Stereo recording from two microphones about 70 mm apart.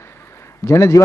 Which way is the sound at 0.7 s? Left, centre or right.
Left.